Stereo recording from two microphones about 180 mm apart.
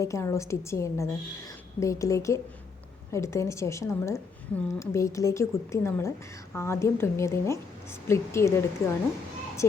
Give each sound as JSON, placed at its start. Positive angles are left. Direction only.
{"t": 0.0, "sound": "a woman's voice", "side_deg": 15}